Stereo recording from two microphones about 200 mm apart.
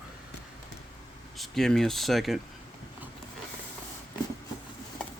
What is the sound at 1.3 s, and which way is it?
Speech, centre (ahead or behind).